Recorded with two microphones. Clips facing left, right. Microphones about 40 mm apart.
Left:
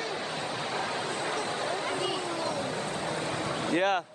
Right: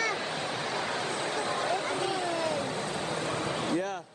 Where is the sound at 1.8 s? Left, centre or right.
Left.